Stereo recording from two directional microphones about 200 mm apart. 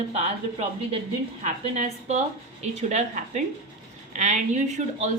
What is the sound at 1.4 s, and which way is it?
A woman's voice, 35° right (ahead or behind).